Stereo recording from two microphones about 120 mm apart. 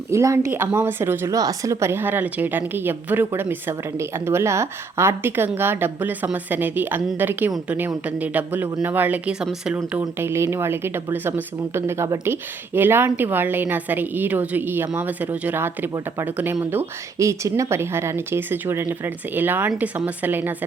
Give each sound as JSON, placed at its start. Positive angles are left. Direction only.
{"t": 0.1, "sound": "speech", "side_deg": -25}